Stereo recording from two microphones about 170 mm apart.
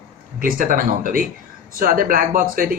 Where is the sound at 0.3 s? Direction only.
55° right (ahead or behind).